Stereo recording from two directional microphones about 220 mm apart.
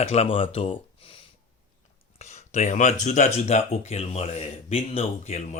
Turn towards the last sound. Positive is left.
turn(degrees=30)  # may be behind; listen again after turning